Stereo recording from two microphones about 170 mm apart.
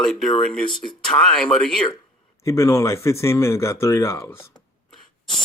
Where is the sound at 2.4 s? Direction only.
15° left (ahead or behind).